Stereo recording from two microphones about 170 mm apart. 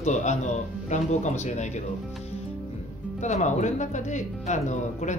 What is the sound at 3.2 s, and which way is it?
Speech, 45° left (ahead or behind).